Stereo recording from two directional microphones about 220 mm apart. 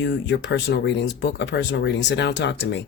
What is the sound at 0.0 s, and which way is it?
Speech, 55° left (ahead or behind).